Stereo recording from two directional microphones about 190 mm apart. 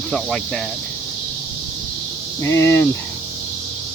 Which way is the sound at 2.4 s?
15° left (ahead or behind).